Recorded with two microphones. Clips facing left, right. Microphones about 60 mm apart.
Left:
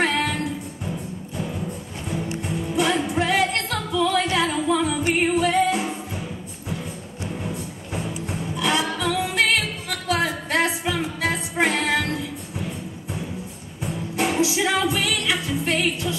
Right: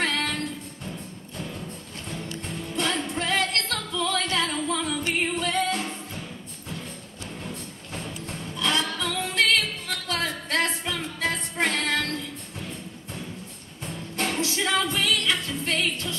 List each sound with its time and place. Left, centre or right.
0.0 s music: centre
7.2 s music: centre